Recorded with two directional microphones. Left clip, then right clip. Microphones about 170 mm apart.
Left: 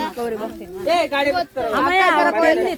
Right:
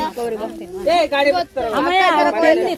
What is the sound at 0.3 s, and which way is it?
Speech, 50° left (ahead or behind).